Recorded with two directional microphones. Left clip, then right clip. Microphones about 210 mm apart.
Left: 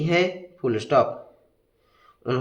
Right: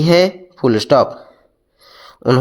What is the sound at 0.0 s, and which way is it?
A man's voice, 55° right (ahead or behind).